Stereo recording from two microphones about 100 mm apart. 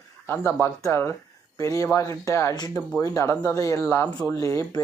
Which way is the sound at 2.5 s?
40° left (ahead or behind).